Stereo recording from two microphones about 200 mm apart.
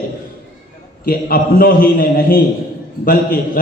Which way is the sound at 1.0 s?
45° left (ahead or behind).